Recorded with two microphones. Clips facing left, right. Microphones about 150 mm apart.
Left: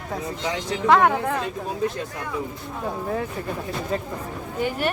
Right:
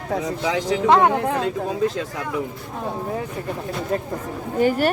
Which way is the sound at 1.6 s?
90° right.